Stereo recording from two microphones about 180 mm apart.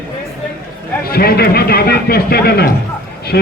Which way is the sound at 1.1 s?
60° left (ahead or behind).